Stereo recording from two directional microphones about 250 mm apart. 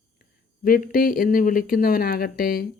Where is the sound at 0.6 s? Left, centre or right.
Left.